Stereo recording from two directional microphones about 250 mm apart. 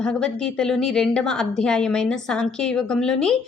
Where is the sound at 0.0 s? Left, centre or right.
Centre.